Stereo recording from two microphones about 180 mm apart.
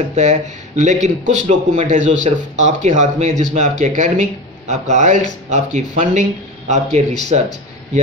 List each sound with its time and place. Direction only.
0.1 s speech: 40° right (ahead or behind)